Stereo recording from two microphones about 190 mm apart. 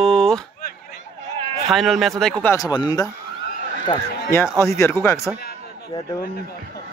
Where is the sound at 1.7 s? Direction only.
Centre (ahead or behind).